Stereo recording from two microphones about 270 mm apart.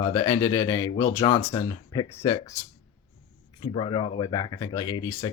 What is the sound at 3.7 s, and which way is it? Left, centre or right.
Speech, centre.